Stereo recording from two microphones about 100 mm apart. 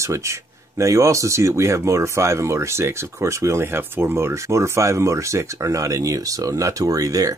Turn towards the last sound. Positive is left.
turn(degrees=-35)  # may be behind; listen again after turning